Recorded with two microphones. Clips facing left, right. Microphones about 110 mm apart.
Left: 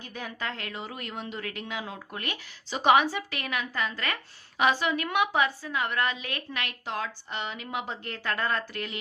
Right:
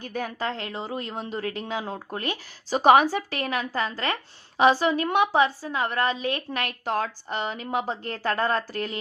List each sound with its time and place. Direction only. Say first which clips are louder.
0.0 s a woman's voice: right 7 dB; 45° right (ahead or behind)
0.3 s a woman's voice: right 5 dB; 30° right (ahead or behind)